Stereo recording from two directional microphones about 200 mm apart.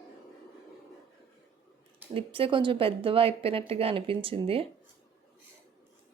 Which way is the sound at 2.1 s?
25° right (ahead or behind).